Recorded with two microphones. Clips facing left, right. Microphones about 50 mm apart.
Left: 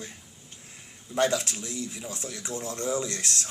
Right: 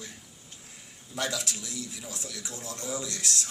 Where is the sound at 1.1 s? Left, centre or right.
Left.